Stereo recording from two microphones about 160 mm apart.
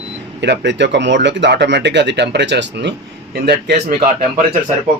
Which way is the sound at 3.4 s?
55° right (ahead or behind).